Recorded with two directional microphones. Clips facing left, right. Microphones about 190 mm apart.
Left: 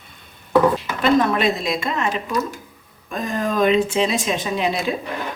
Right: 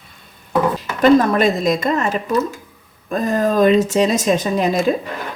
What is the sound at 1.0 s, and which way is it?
Speech, 40° right (ahead or behind).